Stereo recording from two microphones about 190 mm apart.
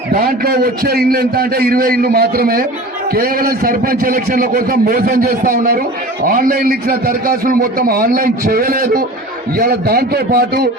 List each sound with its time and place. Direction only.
0.1 s a man's voice: 50° right (ahead or behind)